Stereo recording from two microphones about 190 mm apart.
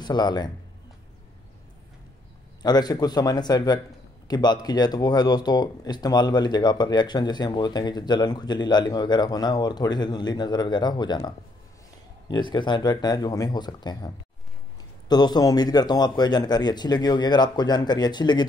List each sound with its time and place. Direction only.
0.0 s speech: 20° left (ahead or behind)
2.6 s speech: 20° left (ahead or behind)